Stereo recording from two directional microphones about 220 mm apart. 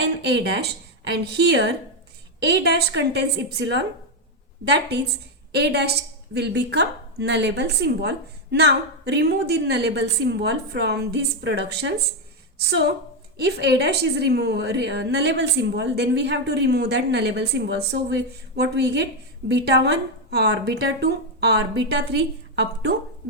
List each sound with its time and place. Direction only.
0.0 s a woman's voice: 50° right (ahead or behind)
13.3 s a woman's voice: 50° right (ahead or behind)